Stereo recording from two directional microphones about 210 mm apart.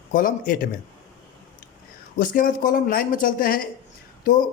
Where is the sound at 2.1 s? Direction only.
40° left (ahead or behind).